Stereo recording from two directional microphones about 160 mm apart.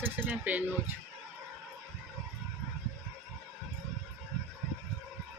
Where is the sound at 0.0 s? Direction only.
10° right (ahead or behind).